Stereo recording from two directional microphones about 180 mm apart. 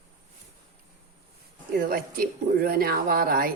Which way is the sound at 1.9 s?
55° right (ahead or behind).